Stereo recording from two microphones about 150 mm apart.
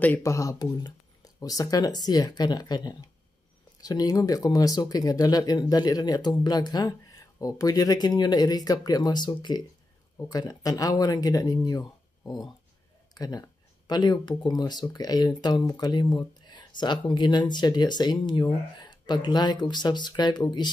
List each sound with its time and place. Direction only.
0.0 s speech: 15° left (ahead or behind)
13.1 s speech: 25° left (ahead or behind)